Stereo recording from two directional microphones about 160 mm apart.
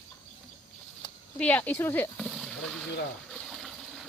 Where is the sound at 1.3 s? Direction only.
10° left (ahead or behind).